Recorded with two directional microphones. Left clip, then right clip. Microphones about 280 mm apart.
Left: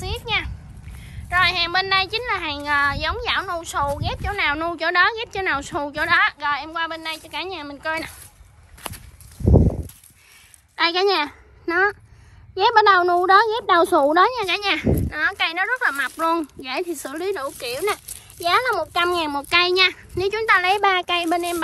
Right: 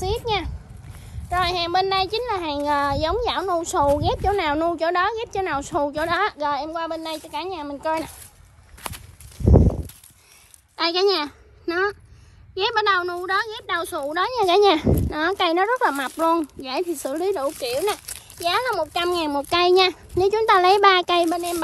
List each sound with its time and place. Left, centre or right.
0.0 s a sound: centre
1.3 s a woman's voice: centre
8.8 s walk: centre
9.5 s a sound: centre
10.8 s a woman's voice: centre
14.3 s a woman's voice: centre
21.3 s a woman's voice: centre